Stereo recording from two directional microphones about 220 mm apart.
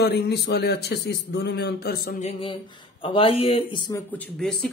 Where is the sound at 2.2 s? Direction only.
25° left (ahead or behind).